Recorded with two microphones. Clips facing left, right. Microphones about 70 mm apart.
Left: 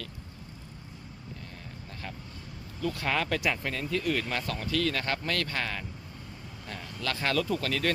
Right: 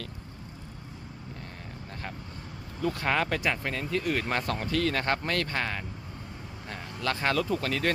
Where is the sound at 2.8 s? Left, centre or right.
Right.